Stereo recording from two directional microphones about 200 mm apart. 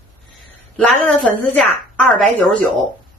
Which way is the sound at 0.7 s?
5° left (ahead or behind).